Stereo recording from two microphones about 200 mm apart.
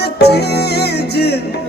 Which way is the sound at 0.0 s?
55° left (ahead or behind).